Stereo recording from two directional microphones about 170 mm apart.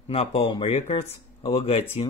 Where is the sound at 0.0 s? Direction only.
35° left (ahead or behind).